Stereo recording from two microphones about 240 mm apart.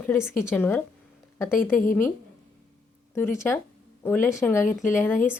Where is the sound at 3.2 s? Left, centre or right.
Centre.